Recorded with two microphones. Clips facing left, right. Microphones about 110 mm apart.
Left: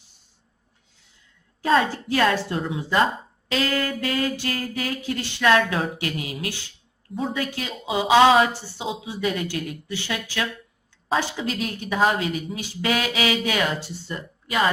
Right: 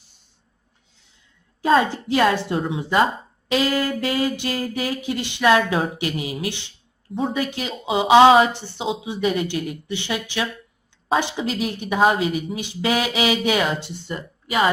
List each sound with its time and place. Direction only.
1.6 s a woman's voice: 20° right (ahead or behind)
3.5 s a sound: 15° right (ahead or behind)
7.3 s a woman's voice: 20° right (ahead or behind)